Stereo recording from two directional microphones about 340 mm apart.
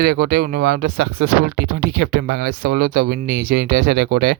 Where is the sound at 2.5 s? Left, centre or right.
Right.